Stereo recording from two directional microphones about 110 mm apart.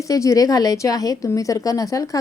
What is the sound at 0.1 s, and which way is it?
A woman's voice, 30° left (ahead or behind).